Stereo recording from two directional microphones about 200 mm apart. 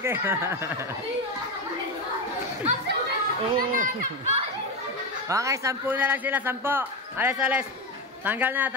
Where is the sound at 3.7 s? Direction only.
45° right (ahead or behind).